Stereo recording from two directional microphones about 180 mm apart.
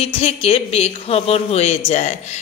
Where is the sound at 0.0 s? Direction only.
35° left (ahead or behind).